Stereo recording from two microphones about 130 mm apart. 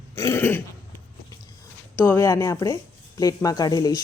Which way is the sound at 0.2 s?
20° left (ahead or behind).